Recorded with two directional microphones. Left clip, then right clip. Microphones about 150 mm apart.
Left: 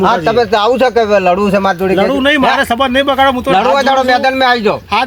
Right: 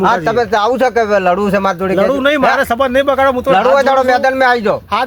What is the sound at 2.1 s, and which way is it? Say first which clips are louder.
Speech: left 1 dB; 25° right (ahead or behind).